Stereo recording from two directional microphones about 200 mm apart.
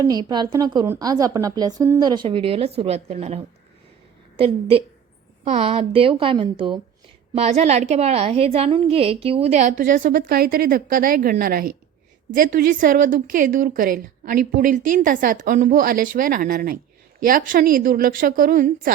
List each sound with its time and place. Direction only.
0.0 s a woman's voice: 20° right (ahead or behind)
5.5 s a woman's voice: 30° right (ahead or behind)